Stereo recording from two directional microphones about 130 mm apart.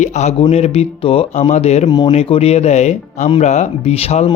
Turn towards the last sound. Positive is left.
turn(degrees=50)  # may be behind; listen again after turning